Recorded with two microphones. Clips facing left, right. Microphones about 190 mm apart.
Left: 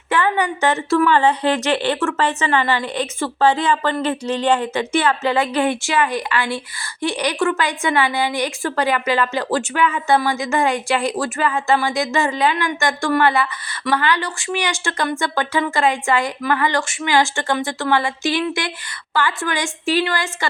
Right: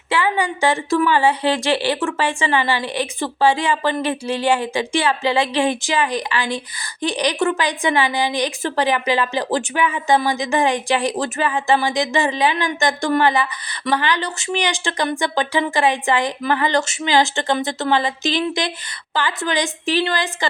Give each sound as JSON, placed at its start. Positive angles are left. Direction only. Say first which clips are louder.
{"t": 0.1, "sound": "a woman's voice", "louder": "left 1 dB", "side_deg": -10}